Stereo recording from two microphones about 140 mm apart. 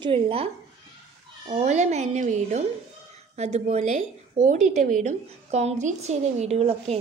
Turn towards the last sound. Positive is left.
turn(degrees=-45)  # may be behind; listen again after turning